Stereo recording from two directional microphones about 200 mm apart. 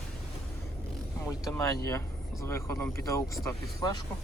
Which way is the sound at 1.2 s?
15° left (ahead or behind).